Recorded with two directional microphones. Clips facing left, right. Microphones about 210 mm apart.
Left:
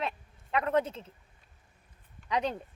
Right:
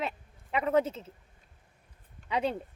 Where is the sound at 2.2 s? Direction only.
5° right (ahead or behind).